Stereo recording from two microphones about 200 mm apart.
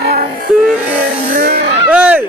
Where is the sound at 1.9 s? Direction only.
5° right (ahead or behind).